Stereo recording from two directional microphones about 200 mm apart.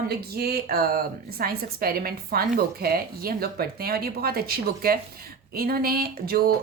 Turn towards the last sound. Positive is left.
turn(degrees=-50)  # may be behind; listen again after turning